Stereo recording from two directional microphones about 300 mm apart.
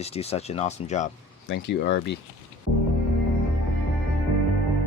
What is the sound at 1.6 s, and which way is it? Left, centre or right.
Speech, left.